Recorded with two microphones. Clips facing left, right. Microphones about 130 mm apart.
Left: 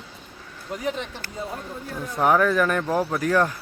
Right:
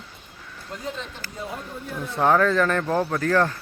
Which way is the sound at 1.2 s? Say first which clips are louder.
Left 2 dB; 55° left (ahead or behind).